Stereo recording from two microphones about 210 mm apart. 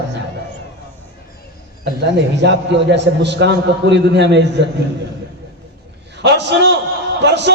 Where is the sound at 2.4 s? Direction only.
55° right (ahead or behind).